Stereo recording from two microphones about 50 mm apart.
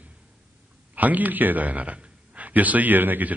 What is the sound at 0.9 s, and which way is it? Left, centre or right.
A man's voice, right.